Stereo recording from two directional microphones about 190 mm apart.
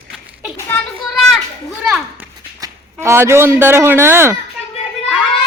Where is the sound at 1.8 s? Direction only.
5° right (ahead or behind).